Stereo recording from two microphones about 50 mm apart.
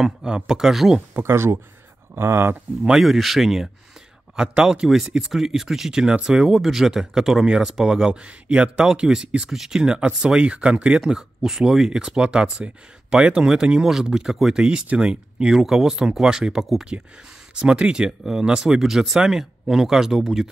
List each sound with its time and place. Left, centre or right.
0.2 s speech: centre
1.2 s speech: right
2.8 s speech: centre
4.4 s speech: centre
4.8 s speech: centre; by 11.0 s right
11.1 s speech: centre
15.5 s speech: centre
17.6 s speech: centre
18.8 s speech: centre